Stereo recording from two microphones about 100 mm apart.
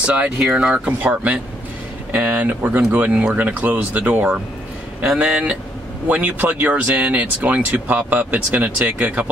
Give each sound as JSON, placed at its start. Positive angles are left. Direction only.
{"t": 0.0, "sound": "speech", "side_deg": -15}